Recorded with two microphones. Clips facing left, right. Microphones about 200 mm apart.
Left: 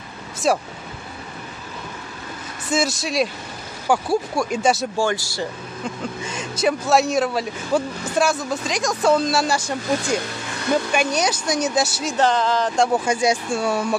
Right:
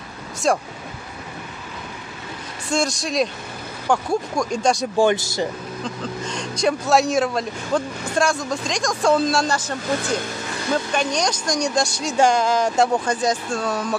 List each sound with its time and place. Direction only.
0.4 s speech: 5° left (ahead or behind)
2.7 s speech: 5° left (ahead or behind)
4.9 s speech: 20° right (ahead or behind)
6.2 s speech: 5° left (ahead or behind)
12.2 s speech: 10° right (ahead or behind)
12.9 s speech: 10° left (ahead or behind)